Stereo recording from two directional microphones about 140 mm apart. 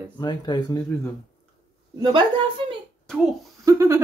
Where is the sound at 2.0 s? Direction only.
35° right (ahead or behind).